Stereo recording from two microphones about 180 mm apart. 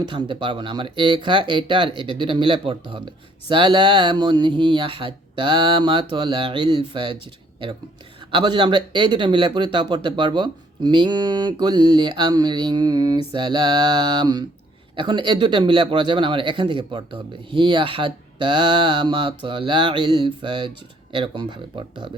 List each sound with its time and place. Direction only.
0.1 s speech: 25° right (ahead or behind)
8.3 s speech: 25° right (ahead or behind)